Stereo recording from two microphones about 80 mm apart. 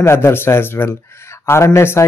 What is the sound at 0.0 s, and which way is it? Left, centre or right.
Speech, left.